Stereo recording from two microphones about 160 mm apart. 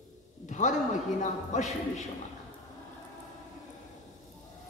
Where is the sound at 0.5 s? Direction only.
50° left (ahead or behind).